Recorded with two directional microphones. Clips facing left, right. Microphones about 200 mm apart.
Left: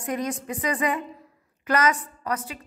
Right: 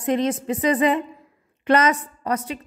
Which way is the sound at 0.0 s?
25° right (ahead or behind).